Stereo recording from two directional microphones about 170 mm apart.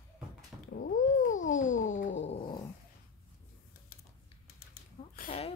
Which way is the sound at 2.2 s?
30° left (ahead or behind).